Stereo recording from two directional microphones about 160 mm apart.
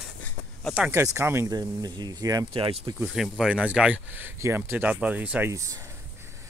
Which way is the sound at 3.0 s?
5° right (ahead or behind).